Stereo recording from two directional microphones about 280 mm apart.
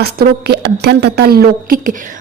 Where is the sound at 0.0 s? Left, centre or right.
Right.